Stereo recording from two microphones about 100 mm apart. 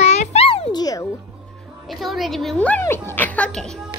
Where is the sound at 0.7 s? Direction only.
40° left (ahead or behind).